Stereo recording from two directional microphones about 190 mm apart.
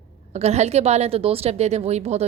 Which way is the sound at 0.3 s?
35° right (ahead or behind).